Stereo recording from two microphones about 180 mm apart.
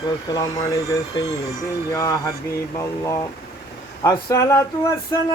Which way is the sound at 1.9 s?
20° left (ahead or behind).